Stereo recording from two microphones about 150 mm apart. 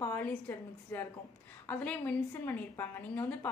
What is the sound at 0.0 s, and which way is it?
A woman's voice, 15° left (ahead or behind).